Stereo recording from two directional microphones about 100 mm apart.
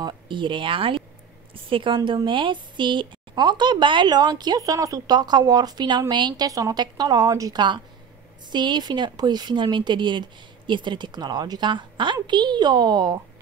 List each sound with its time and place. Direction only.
0.0 s speech: 55° right (ahead or behind); by 7.6 s 35° right (ahead or behind)
8.5 s speech: 50° right (ahead or behind)